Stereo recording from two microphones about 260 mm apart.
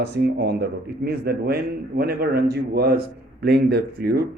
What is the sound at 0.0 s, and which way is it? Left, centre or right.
Speech, right.